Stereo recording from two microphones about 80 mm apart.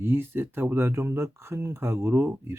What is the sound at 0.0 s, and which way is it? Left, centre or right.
Speech, right.